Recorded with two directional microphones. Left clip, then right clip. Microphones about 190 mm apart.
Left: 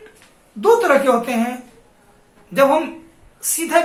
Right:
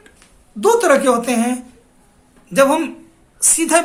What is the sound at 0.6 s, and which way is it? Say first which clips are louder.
Speech: right 1 dB; 55° right (ahead or behind).